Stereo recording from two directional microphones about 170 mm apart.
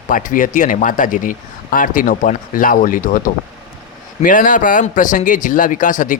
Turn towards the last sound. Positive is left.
turn(degrees=50)  # may be behind; listen again after turning